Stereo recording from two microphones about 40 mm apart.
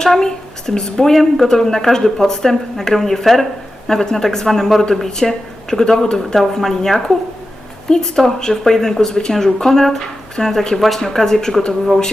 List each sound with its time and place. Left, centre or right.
0.0 s a woman's voice: centre